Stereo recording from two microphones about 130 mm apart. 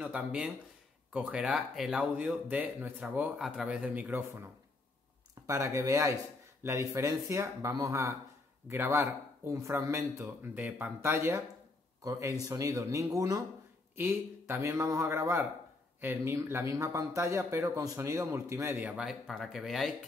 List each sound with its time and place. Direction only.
0.0 s speech: 10° right (ahead or behind)
5.5 s speech: 20° right (ahead or behind); by 19.9 s centre (ahead or behind)